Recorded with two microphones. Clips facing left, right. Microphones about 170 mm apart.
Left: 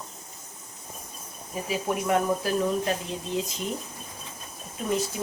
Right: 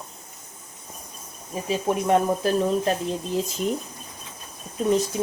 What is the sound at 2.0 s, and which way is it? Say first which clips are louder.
Speech: right 4 dB; 30° right (ahead or behind).